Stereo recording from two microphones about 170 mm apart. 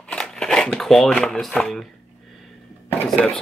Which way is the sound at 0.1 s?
5° left (ahead or behind).